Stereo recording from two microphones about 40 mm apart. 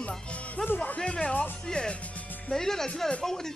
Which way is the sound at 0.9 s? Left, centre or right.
Left.